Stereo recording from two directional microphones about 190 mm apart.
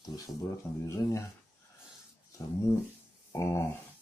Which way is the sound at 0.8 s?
15° left (ahead or behind).